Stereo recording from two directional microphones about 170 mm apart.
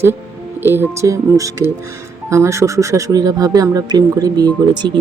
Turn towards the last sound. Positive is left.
turn(degrees=-25)  # may be behind; listen again after turning